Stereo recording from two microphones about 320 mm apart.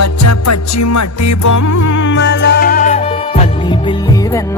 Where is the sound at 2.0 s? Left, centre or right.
Left; by 3.9 s centre.